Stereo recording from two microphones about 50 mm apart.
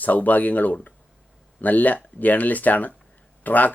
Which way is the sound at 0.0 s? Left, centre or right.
Left.